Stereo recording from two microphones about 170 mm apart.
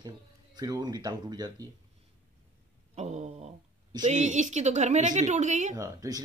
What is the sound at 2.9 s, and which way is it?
A woman's voice, 40° right (ahead or behind).